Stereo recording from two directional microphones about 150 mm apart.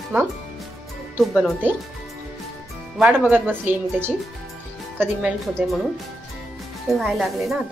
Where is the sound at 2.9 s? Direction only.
5° right (ahead or behind).